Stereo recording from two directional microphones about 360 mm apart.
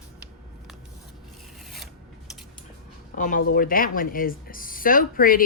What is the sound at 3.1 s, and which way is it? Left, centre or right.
Speech, left.